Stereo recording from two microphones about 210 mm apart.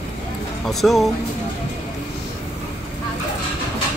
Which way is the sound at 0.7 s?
Centre (ahead or behind).